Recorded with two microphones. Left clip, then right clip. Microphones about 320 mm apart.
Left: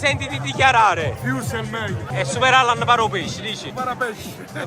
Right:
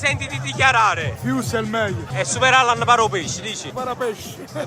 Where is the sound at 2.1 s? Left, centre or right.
Centre.